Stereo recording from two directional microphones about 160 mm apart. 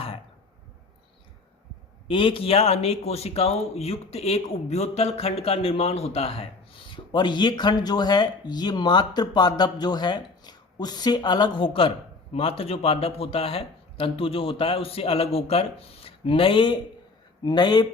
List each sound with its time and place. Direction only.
2.0 s a man's voice: 35° left (ahead or behind)